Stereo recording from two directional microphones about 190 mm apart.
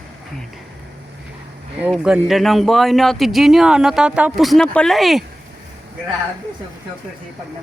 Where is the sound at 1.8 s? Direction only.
5° right (ahead or behind).